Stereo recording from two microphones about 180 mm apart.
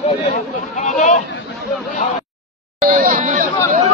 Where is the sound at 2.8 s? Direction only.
50° right (ahead or behind).